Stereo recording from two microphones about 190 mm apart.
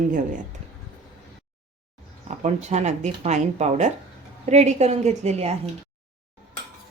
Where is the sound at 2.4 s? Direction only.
35° right (ahead or behind).